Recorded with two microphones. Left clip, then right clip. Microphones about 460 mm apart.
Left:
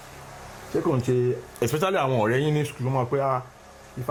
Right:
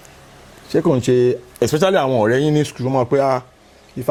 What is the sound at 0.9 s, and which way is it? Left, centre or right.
Speech, right.